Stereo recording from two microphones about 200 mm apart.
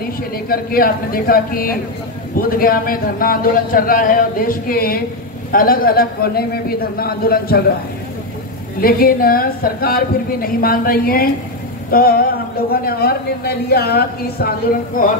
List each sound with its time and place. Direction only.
0.5 s a man's voice: 45° left (ahead or behind)
8.8 s a man's voice: 45° left (ahead or behind)